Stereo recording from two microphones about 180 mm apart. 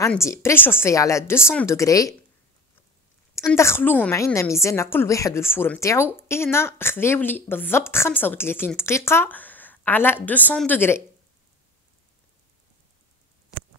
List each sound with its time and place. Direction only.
0.1 s a woman's voice: 15° left (ahead or behind)
3.3 s a woman's voice: 15° left (ahead or behind)